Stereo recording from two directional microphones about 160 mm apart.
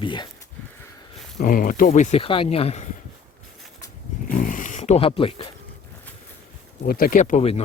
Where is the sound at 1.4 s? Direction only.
60° left (ahead or behind); by 2.9 s 40° left (ahead or behind).